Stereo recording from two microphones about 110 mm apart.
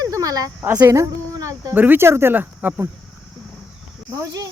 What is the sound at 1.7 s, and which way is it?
Speech, 15° right (ahead or behind).